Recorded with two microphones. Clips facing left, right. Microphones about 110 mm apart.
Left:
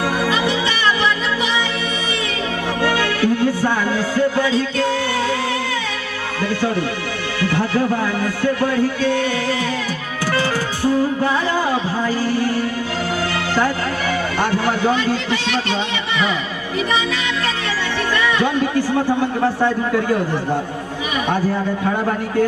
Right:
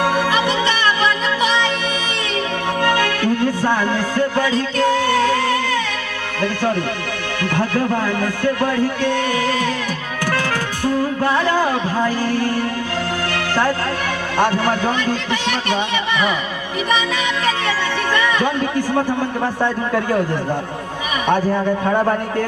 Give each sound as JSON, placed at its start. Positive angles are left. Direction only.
{"t": 3.0, "sound": "music", "side_deg": 15}
{"t": 4.4, "sound": "a man's voice", "side_deg": 15}
{"t": 5.1, "sound": "music", "side_deg": 15}
{"t": 7.4, "sound": "music", "side_deg": -55}
{"t": 8.2, "sound": "a man's voice", "side_deg": -50}
{"t": 10.8, "sound": "music", "side_deg": 15}
{"t": 14.8, "sound": "a man's voice", "side_deg": 15}